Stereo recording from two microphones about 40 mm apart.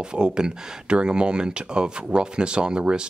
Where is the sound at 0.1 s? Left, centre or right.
Right.